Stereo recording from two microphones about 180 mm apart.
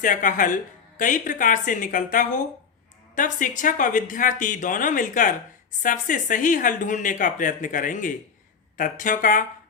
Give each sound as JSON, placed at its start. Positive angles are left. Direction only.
{"t": 0.0, "sound": "a woman's voice", "side_deg": 45}